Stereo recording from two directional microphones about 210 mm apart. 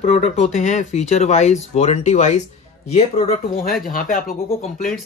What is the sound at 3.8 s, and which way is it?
Speech, 40° left (ahead or behind).